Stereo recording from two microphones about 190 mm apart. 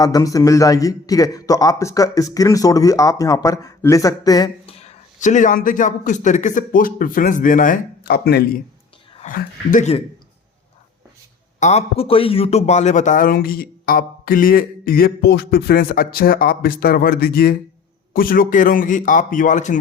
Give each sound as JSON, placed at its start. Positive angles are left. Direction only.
{"t": 0.0, "sound": "a man's voice", "side_deg": 20}
{"t": 4.8, "sound": "speech", "side_deg": 35}
{"t": 9.2, "sound": "speech", "side_deg": 45}
{"t": 11.6, "sound": "speech", "side_deg": 35}